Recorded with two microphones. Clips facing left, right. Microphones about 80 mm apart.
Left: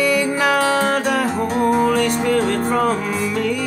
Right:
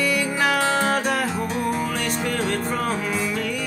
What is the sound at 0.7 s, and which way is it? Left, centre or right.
Music, centre.